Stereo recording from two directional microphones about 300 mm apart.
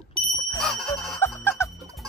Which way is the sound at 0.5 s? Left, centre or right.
Centre.